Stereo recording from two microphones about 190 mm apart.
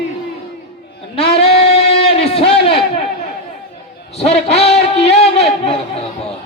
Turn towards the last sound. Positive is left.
turn(degrees=35)  # may be behind; listen again after turning